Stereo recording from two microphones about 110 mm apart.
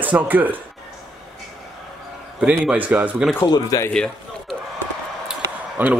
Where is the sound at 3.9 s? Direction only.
5° left (ahead or behind).